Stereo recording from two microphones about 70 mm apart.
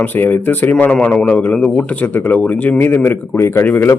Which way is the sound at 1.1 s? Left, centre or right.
Centre.